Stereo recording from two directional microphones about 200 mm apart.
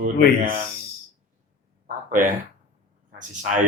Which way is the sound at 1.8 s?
40° right (ahead or behind).